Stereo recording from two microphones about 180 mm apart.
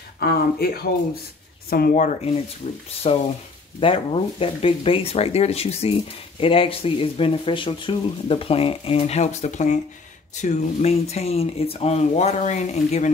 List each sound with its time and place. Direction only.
0.2 s speech: 60° left (ahead or behind)
1.7 s speech: 50° left (ahead or behind)